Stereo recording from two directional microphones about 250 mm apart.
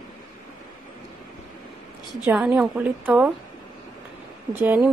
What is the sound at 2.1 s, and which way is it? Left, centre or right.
A woman's voice, centre.